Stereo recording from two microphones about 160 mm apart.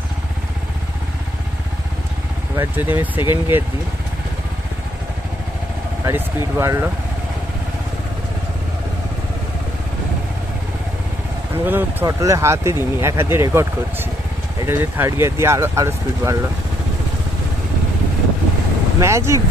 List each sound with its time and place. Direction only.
2.5 s speech: 15° right (ahead or behind)
6.0 s speech: 15° right (ahead or behind)
11.5 s speech: 15° right (ahead or behind)
18.9 s speech: 20° right (ahead or behind)